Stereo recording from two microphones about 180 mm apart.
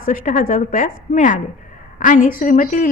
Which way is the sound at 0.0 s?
45° left (ahead or behind).